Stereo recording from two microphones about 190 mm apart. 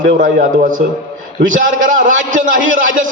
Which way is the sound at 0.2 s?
45° right (ahead or behind).